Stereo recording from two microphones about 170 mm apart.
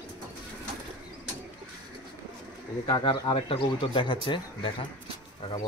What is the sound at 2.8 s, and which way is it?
Speech, 30° left (ahead or behind).